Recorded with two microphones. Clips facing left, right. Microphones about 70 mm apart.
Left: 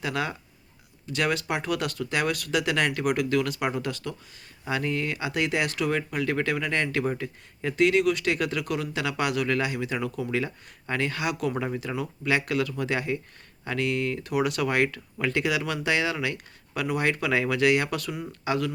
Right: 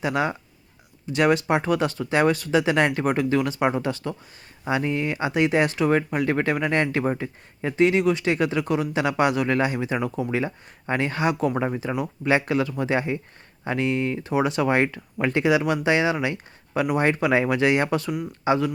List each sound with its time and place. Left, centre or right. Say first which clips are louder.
0.0 s speech: right 5 dB; right